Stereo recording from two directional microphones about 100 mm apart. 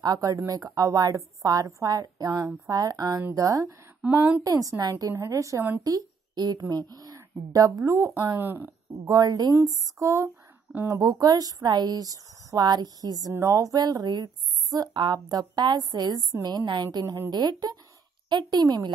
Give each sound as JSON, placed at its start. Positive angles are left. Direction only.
{"t": 0.0, "sound": "a woman's voice", "side_deg": -40}
{"t": 4.0, "sound": "a woman's voice", "side_deg": -15}
{"t": 4.4, "sound": "a woman's voice", "side_deg": -35}
{"t": 10.7, "sound": "a woman's voice", "side_deg": -20}
{"t": 11.0, "sound": "a woman's voice", "side_deg": -40}